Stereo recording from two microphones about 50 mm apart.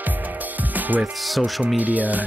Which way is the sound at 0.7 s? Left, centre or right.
Right.